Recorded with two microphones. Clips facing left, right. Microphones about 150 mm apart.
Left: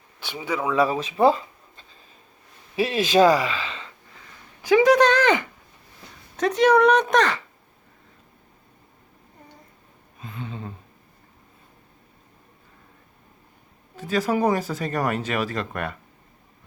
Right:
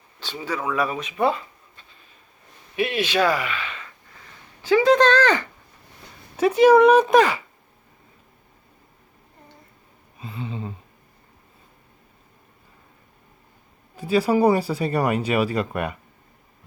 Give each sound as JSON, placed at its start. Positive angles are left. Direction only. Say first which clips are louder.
{"t": 0.2, "sound": "speech", "louder": "left 1 dB", "side_deg": 15}
{"t": 4.6, "sound": "speech", "louder": "even", "side_deg": 15}
{"t": 6.3, "sound": "speech", "louder": "right 4 dB", "side_deg": -5}
{"t": 10.2, "sound": "a sound", "louder": "right 3 dB", "side_deg": -5}
{"t": 13.9, "sound": "speech", "louder": "right 4 dB", "side_deg": -10}